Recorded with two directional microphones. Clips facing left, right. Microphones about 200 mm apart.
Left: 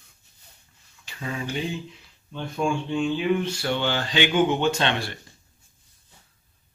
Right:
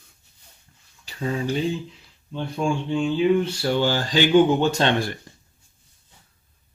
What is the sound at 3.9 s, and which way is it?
Speech, 40° right (ahead or behind).